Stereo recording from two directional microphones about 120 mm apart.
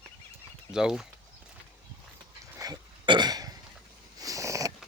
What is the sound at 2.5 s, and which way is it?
Burping, 30° right (ahead or behind).